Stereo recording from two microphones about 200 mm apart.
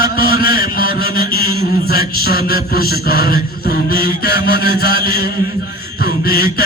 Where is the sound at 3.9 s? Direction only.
50° left (ahead or behind).